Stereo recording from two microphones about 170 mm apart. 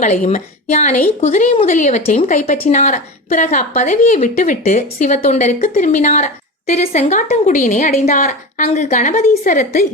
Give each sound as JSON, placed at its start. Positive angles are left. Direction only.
{"t": 0.0, "sound": "speech", "side_deg": 45}